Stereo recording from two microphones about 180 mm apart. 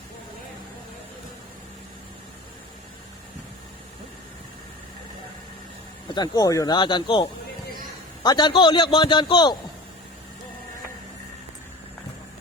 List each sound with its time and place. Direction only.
6.1 s a man's voice: 25° left (ahead or behind)